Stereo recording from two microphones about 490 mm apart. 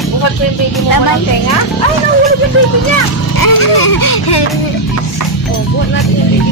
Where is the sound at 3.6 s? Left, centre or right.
Left.